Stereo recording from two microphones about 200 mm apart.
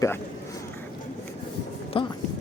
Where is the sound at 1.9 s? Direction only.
25° left (ahead or behind).